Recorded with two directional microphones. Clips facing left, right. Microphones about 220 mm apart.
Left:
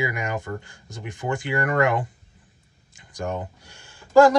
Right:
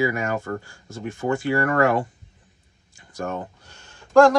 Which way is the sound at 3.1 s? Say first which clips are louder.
Even; 15° left (ahead or behind).